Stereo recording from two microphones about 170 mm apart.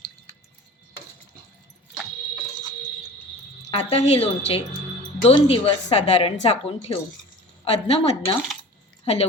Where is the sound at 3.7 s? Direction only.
35° left (ahead or behind).